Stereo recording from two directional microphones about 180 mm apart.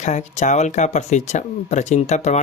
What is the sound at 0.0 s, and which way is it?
Speech, 40° left (ahead or behind).